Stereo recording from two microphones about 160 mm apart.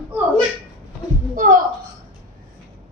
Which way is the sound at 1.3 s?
60° right (ahead or behind).